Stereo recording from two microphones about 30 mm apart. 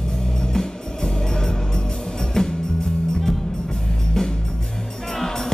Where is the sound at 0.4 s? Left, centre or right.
Left.